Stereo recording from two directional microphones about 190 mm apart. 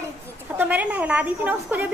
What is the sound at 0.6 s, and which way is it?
A woman's voice, 10° right (ahead or behind).